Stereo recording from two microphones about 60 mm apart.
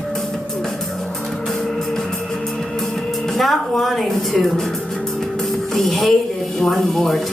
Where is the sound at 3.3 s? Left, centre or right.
Centre.